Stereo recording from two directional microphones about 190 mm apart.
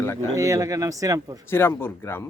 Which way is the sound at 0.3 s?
15° right (ahead or behind).